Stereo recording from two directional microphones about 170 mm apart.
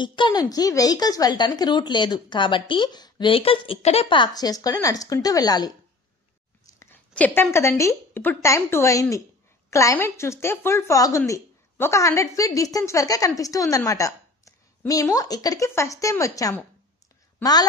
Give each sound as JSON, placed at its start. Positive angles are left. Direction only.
{"t": 0.0, "sound": "a woman's voice", "side_deg": 25}
{"t": 7.2, "sound": "a woman's voice", "side_deg": 10}